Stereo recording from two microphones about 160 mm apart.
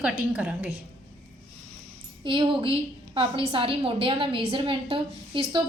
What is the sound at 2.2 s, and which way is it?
A woman's voice, 30° right (ahead or behind).